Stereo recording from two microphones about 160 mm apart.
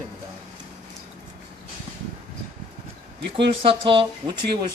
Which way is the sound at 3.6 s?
35° right (ahead or behind).